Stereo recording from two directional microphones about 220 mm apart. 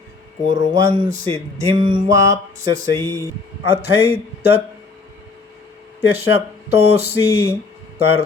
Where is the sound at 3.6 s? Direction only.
25° right (ahead or behind).